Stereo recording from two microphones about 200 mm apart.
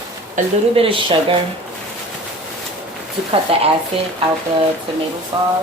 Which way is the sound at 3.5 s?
30° right (ahead or behind).